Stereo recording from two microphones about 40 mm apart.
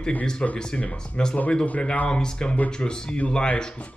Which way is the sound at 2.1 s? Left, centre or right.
Left.